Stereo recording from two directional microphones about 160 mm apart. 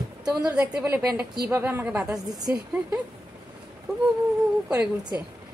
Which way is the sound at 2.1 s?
25° right (ahead or behind).